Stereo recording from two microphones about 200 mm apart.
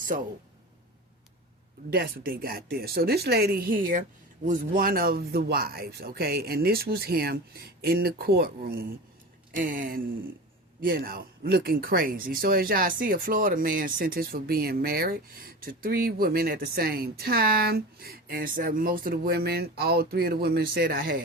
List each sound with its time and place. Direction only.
1.9 s speech: 50° right (ahead or behind)